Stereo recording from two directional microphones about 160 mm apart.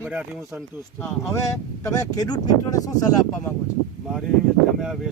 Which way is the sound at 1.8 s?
20° left (ahead or behind).